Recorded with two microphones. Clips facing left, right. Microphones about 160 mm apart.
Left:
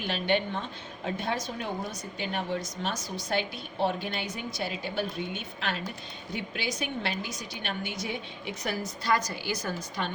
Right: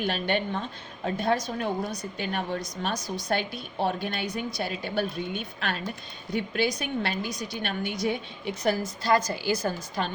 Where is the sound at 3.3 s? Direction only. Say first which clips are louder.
Right 1 dB; 50° right (ahead or behind).